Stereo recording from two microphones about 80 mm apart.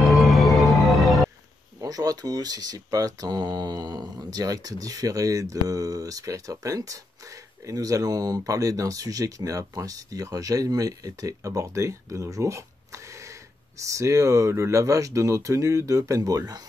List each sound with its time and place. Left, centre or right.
0.2 s music: centre
1.8 s speech: right